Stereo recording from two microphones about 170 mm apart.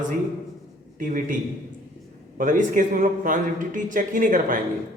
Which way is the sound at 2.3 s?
50° right (ahead or behind).